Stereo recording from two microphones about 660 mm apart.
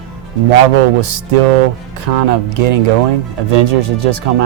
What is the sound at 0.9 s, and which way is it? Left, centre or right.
Speech, right.